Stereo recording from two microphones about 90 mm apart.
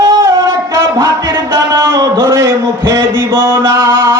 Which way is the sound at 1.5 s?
30° right (ahead or behind).